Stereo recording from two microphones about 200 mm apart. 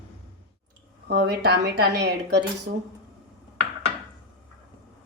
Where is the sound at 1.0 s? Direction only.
50° right (ahead or behind).